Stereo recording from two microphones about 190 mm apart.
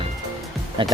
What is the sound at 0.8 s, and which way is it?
Speech, 25° right (ahead or behind).